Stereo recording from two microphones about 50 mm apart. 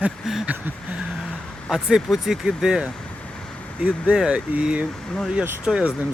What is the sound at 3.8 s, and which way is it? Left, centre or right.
Speech, right.